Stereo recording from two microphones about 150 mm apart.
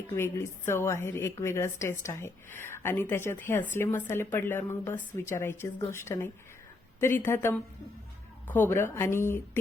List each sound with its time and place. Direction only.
0.1 s a woman's voice: 15° left (ahead or behind)